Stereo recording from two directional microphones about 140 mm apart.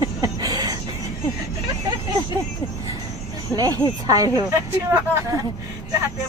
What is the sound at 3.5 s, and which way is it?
Speech, 25° right (ahead or behind).